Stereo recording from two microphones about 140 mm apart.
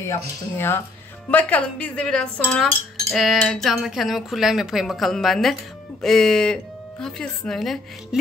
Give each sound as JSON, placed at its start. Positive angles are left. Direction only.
{"t": 0.1, "sound": "speech", "side_deg": 15}
{"t": 1.3, "sound": "cutlery", "side_deg": 10}